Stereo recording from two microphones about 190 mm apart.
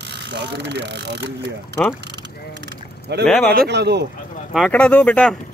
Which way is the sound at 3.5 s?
55° right (ahead or behind).